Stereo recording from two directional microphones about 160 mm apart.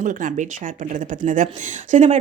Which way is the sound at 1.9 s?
50° right (ahead or behind).